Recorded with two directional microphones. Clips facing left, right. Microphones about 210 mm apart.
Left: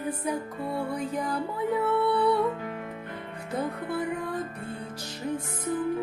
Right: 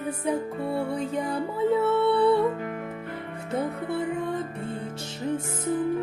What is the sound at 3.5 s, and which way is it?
Music, 25° right (ahead or behind).